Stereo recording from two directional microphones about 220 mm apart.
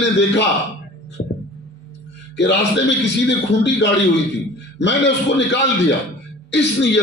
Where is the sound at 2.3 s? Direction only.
50° left (ahead or behind).